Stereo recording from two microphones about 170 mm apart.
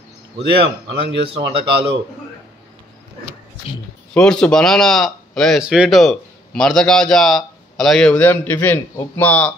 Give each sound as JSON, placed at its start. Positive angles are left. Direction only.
{"t": 0.4, "sound": "a man's voice", "side_deg": -90}
{"t": 1.3, "sound": "speech", "side_deg": -30}
{"t": 4.1, "sound": "speech", "side_deg": 5}